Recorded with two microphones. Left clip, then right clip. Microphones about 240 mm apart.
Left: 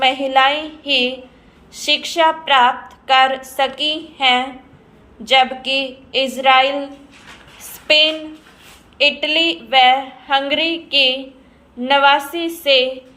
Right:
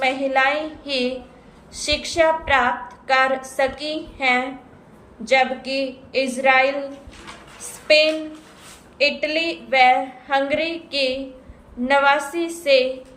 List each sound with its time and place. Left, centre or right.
0.0 s a woman's voice: centre
7.9 s a woman's voice: centre